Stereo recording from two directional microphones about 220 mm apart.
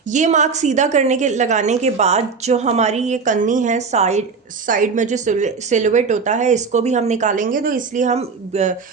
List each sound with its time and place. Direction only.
0.1 s a woman's voice: 35° right (ahead or behind)